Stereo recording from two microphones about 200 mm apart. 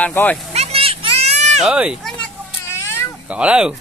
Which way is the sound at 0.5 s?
30° right (ahead or behind).